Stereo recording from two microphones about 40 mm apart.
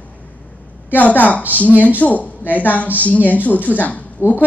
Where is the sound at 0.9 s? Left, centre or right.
Left.